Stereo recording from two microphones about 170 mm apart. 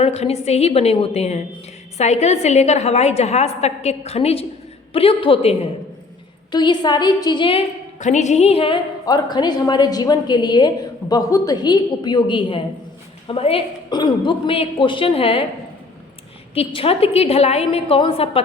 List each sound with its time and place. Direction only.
0.0 s a woman's voice: 40° left (ahead or behind)
7.9 s a woman's voice: 45° left (ahead or behind)
16.6 s a woman's voice: 35° left (ahead or behind)